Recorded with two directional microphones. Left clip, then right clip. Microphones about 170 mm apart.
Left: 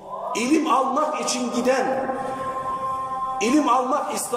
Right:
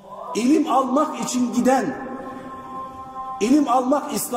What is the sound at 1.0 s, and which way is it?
Speech, 45° right (ahead or behind).